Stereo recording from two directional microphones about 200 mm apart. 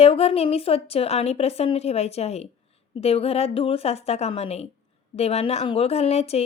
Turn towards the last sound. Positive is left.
turn(degrees=30)  # may be behind; listen again after turning